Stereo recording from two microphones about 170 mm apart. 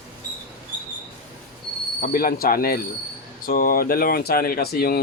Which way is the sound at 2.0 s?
55° left (ahead or behind).